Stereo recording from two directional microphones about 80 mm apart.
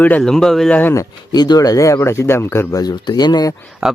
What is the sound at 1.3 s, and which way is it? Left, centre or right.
Speech, left.